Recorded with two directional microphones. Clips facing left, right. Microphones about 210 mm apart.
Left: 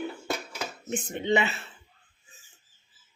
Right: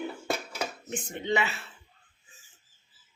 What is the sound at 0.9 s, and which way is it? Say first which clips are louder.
Speech: left 4 dB; 20° left (ahead or behind).